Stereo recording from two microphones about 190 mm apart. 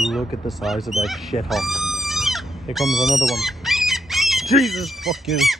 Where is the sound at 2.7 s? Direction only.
Centre (ahead or behind).